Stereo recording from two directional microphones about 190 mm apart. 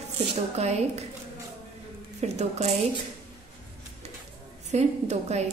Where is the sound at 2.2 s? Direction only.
35° right (ahead or behind).